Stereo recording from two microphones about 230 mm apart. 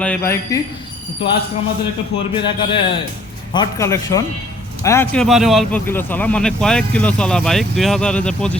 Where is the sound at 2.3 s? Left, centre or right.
Left.